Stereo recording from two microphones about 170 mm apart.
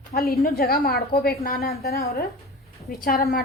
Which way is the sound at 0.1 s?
65° left (ahead or behind).